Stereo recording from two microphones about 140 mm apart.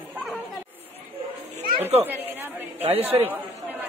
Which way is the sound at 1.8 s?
45° right (ahead or behind).